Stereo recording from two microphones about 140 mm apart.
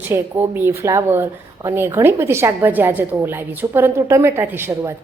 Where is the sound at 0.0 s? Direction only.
15° right (ahead or behind).